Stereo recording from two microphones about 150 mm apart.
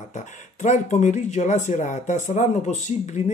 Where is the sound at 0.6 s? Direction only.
50° left (ahead or behind).